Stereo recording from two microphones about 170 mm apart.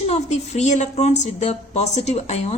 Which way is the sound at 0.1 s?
40° left (ahead or behind).